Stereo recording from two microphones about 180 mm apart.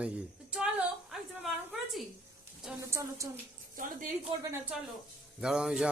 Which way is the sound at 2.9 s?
15° right (ahead or behind).